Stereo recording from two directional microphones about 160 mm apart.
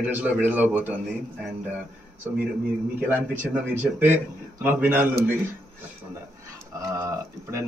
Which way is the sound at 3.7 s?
10° right (ahead or behind).